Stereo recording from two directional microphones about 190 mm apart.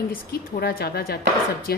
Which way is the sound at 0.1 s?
50° left (ahead or behind).